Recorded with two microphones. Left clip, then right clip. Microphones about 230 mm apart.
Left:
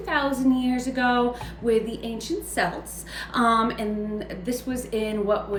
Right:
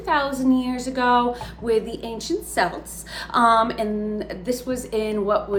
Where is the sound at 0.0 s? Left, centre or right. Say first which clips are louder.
Right 2 dB; centre.